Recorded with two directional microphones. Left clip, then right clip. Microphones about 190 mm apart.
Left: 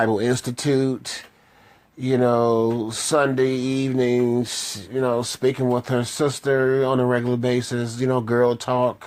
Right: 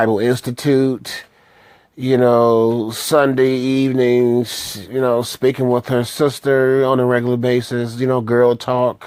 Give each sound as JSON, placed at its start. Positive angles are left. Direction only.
{"t": 0.0, "sound": "speech", "side_deg": -40}